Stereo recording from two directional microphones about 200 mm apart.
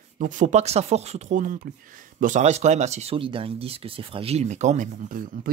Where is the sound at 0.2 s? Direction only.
35° right (ahead or behind).